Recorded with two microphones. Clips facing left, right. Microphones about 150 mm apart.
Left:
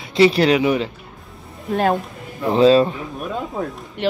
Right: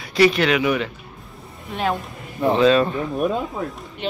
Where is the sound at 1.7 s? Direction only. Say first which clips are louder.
Left 5 dB; 45° left (ahead or behind).